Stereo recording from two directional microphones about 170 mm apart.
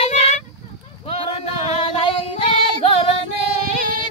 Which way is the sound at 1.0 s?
35° left (ahead or behind).